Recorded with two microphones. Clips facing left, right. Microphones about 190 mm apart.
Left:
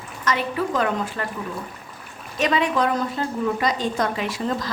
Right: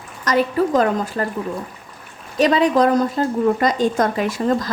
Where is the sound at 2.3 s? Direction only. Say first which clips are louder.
Right 6 dB; 35° right (ahead or behind).